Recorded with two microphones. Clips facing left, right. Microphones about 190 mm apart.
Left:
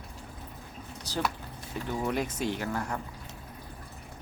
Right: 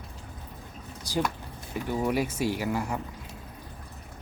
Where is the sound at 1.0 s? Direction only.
10° right (ahead or behind).